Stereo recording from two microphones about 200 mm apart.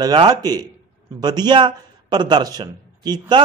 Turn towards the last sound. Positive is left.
turn(degrees=-20)  # may be behind; listen again after turning